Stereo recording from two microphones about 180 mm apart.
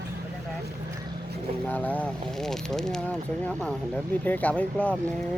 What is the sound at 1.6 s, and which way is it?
Speech, 10° left (ahead or behind).